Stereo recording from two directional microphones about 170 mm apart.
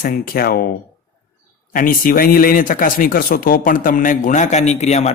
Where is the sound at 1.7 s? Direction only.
55° left (ahead or behind).